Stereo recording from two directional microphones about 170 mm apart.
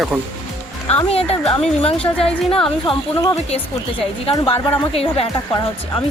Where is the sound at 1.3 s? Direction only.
35° left (ahead or behind).